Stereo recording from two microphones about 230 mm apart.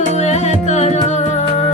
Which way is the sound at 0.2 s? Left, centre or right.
Left.